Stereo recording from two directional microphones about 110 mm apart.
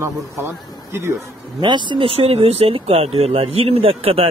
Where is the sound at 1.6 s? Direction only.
45° right (ahead or behind).